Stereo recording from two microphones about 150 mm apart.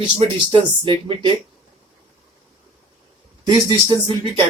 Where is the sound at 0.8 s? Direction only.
30° right (ahead or behind).